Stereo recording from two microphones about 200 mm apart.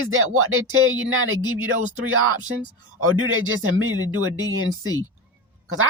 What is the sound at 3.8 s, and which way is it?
Speech, 85° right.